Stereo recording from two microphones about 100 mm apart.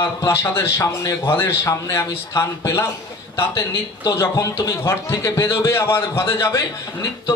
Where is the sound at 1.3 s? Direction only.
25° left (ahead or behind).